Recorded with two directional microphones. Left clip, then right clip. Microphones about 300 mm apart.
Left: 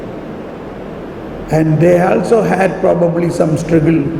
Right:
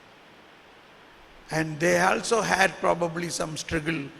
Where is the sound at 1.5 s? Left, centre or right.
Right.